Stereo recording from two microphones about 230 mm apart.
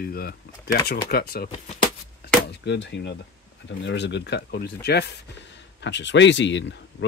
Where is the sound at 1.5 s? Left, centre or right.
Left.